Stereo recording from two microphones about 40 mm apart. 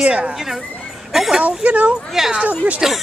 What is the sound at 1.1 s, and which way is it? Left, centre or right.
Speech, centre.